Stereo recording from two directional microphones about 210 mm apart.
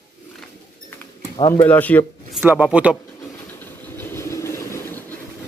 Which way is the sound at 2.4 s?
5° right (ahead or behind).